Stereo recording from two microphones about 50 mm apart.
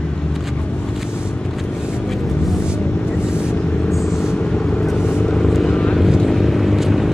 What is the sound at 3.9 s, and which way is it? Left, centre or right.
Vehicle, centre.